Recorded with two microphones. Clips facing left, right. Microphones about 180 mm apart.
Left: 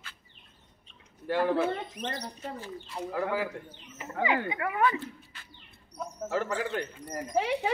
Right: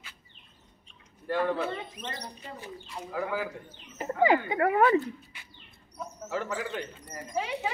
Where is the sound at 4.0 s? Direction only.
40° right (ahead or behind).